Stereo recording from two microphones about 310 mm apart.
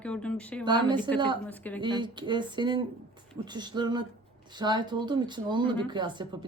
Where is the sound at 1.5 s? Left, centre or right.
Centre.